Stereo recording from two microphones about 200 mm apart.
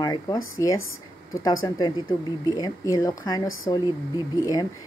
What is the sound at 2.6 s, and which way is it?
A woman's voice, 15° left (ahead or behind).